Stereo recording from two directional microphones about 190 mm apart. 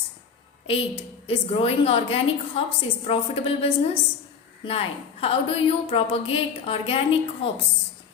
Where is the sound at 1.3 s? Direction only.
30° left (ahead or behind).